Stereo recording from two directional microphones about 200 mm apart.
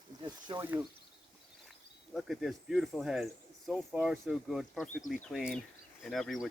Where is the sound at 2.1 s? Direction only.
Centre (ahead or behind).